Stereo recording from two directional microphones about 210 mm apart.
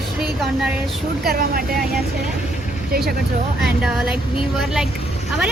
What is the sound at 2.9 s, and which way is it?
Speech, 45° right (ahead or behind).